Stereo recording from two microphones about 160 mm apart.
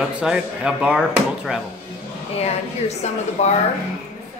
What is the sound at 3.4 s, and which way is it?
Speech, 45° left (ahead or behind).